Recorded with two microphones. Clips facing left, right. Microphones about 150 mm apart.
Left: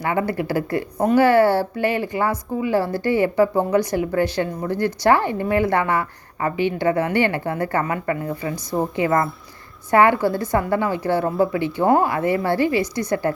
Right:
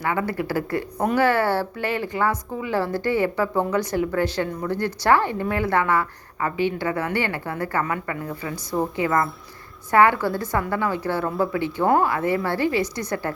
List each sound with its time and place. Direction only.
0.0 s a woman's voice: 20° left (ahead or behind)